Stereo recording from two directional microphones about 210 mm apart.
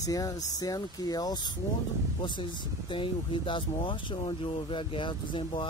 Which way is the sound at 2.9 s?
25° left (ahead or behind).